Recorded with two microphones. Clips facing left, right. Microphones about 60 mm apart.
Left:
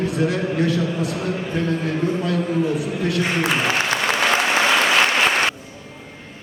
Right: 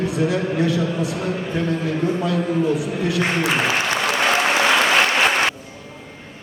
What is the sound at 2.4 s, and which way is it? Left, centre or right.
Speech, centre.